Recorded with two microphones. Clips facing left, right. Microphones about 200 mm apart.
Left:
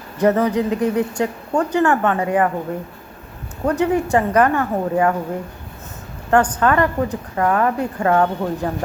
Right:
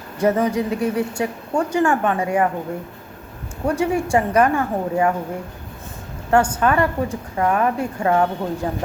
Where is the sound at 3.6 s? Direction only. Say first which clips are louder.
Left 2 dB; 10° right (ahead or behind).